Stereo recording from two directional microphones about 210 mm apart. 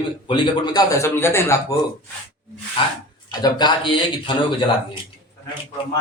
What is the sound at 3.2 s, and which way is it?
Speech, 20° left (ahead or behind).